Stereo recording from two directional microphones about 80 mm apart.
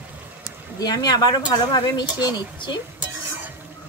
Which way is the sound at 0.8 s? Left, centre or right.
Left.